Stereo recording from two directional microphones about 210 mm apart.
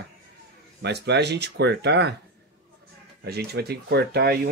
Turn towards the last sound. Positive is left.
turn(degrees=-50)  # may be behind; listen again after turning